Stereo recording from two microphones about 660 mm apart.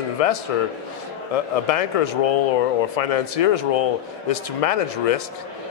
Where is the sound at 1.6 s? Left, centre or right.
Left.